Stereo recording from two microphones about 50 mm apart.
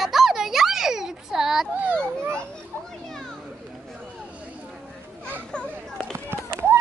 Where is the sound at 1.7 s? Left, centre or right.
Right.